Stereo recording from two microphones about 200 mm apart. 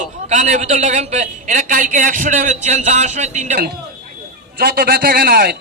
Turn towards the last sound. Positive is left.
turn(degrees=-50)  # may be behind; listen again after turning